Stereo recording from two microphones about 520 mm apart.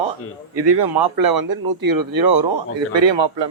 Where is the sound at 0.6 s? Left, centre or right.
Right.